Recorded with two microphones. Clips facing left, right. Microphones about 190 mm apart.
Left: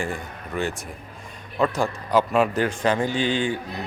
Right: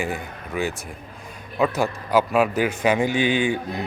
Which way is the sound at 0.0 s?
5° right (ahead or behind).